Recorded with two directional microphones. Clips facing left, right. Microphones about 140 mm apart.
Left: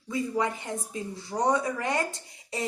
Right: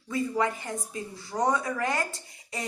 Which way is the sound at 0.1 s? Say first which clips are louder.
Right 1 dB; 20° left (ahead or behind).